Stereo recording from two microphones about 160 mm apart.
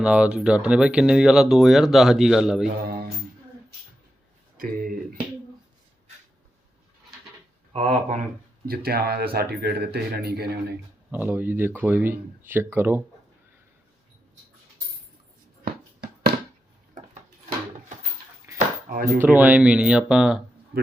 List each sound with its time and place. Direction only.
0.0 s speech: 5° right (ahead or behind)
2.8 s a sound: 70° right (ahead or behind)
4.5 s speech: 60° right (ahead or behind)
7.7 s speech: 40° right (ahead or behind)
8.6 s a man's voice: 70° right (ahead or behind)
11.1 s speech: 10° right (ahead or behind)
15.6 s a sound: 70° right (ahead or behind)
18.5 s a sound: 20° right (ahead or behind)
18.9 s speech: 60° right (ahead or behind)
19.2 s speech: 10° right (ahead or behind)